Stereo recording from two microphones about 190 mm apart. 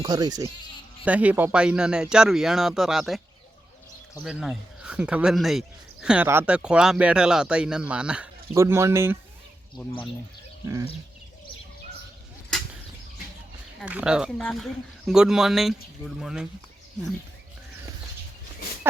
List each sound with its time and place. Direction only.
0.0 s speech: 20° right (ahead or behind)
1.0 s speech: 10° right (ahead or behind)
4.2 s speech: centre (ahead or behind)
13.7 s speech: 5° right (ahead or behind)